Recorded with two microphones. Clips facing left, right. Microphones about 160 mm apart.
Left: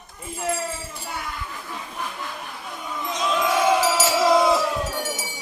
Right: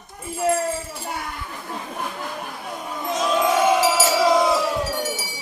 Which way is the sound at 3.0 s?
45° right (ahead or behind).